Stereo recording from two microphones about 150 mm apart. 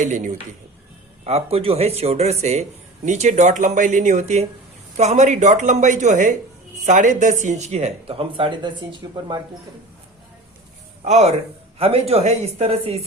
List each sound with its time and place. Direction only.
0.0 s speech: 55° right (ahead or behind)
1.2 s speech: 45° right (ahead or behind)
11.0 s speech: 50° right (ahead or behind)